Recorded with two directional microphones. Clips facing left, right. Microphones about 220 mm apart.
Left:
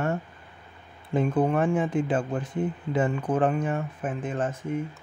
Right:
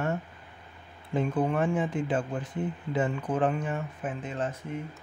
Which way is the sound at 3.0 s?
50° left (ahead or behind).